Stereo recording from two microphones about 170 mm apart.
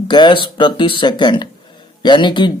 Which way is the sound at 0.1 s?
25° left (ahead or behind).